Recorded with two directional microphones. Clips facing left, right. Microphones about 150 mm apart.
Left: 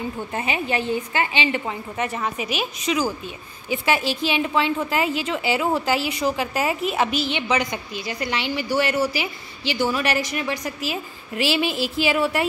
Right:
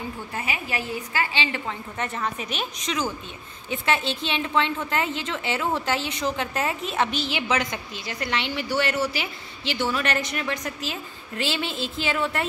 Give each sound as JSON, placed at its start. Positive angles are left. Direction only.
{"t": 0.3, "sound": "a woman's voice", "side_deg": 25}